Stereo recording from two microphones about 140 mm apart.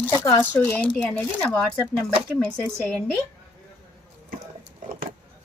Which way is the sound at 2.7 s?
Centre (ahead or behind).